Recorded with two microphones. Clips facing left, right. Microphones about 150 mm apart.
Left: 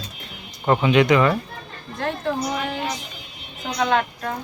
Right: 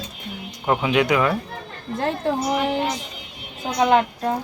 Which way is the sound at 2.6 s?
25° right (ahead or behind).